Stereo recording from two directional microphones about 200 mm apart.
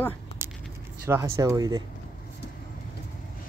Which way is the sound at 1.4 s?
15° right (ahead or behind).